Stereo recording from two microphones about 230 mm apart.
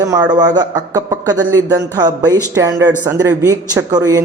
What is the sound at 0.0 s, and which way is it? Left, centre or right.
Speech, centre.